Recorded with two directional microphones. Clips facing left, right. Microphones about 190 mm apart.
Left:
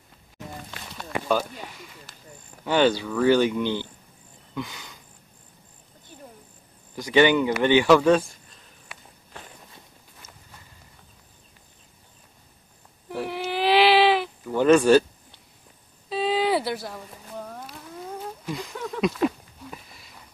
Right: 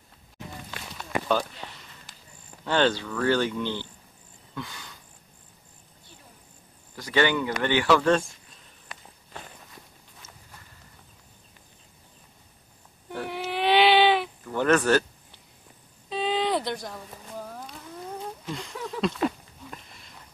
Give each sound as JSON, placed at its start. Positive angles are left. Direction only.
{"t": 1.3, "sound": "a sound", "side_deg": 10}
{"t": 2.6, "sound": "speech", "side_deg": 10}
{"t": 7.0, "sound": "speech", "side_deg": 15}
{"t": 13.1, "sound": "baby cry", "side_deg": 0}
{"t": 14.4, "sound": "cricket", "side_deg": 15}
{"t": 16.1, "sound": "a sound", "side_deg": 5}